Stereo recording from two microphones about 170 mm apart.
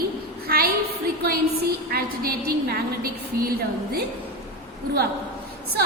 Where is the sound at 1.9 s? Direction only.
65° right (ahead or behind).